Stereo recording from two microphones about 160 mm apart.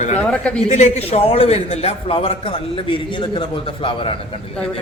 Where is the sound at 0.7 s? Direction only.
45° left (ahead or behind).